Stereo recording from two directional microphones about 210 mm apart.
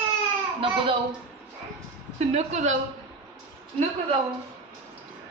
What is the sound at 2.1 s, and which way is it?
Speech, 35° right (ahead or behind).